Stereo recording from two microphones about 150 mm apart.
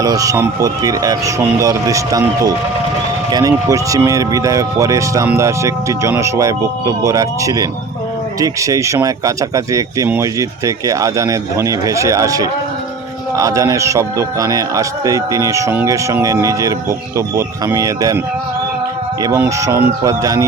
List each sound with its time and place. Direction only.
0.0 s a man's voice: 25° right (ahead or behind)
19.2 s a man's voice: 20° right (ahead or behind)